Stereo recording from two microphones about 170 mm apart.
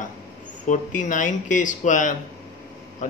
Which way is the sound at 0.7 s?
50° left (ahead or behind).